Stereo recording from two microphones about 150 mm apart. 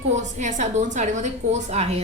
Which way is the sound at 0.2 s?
55° right (ahead or behind).